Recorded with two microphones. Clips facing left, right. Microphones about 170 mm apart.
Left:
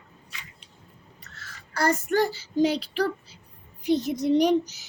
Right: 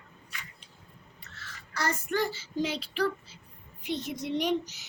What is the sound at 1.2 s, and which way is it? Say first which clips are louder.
Child singing: left 1 dB; 40° left (ahead or behind).